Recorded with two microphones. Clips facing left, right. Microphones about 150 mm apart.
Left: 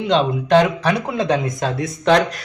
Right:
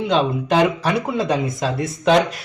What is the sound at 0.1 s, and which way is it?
Speech, 5° right (ahead or behind).